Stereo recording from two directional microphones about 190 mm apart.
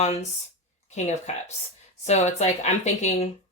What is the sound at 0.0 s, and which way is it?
Speech, 35° left (ahead or behind).